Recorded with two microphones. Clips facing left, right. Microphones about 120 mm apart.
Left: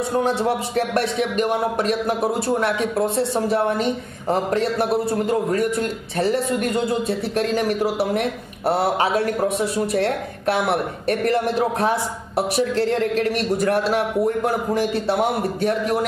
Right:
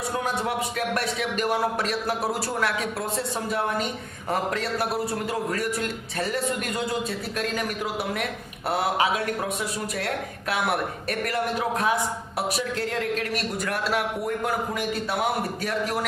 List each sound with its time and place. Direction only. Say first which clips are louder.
0.2 s a man's voice: left 6 dB; 30° left (ahead or behind)